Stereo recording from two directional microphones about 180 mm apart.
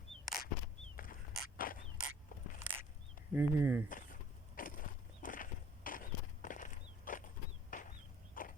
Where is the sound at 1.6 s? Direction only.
50° left (ahead or behind).